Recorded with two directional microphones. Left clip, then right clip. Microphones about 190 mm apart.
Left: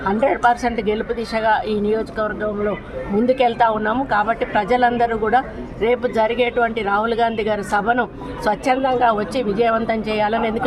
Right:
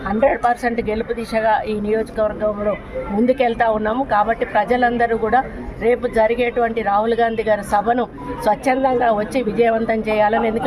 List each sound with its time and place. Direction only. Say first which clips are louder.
0.2 s a woman's voice: right 1 dB; centre (ahead or behind)
3.2 s a woman's voice: left 1 dB; 5° right (ahead or behind)